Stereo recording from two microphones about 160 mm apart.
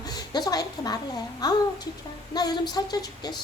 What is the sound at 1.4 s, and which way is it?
A woman's voice, 25° left (ahead or behind).